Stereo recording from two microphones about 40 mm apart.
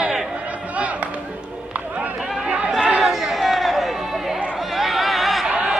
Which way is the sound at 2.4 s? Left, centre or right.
Right.